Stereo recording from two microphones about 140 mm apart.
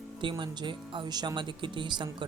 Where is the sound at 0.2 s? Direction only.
35° right (ahead or behind).